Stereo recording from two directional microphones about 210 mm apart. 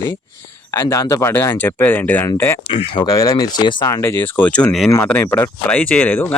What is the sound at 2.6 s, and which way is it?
Speech, 25° left (ahead or behind).